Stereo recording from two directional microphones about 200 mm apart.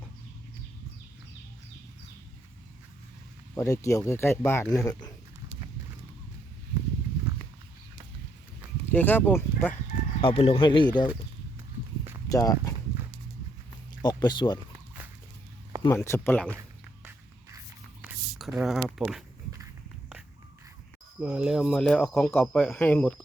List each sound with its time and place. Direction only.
3.5 s speech: 15° left (ahead or behind)
8.9 s speech: 10° left (ahead or behind)
10.2 s speech: 25° left (ahead or behind)
12.3 s speech: 15° left (ahead or behind)
14.0 s speech: 20° left (ahead or behind)
15.9 s speech: 15° left (ahead or behind)
18.0 s a sound: centre (ahead or behind)
21.2 s speech: 5° right (ahead or behind)